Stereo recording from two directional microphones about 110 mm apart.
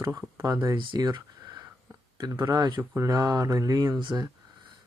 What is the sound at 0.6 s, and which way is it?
Speech, 45° right (ahead or behind).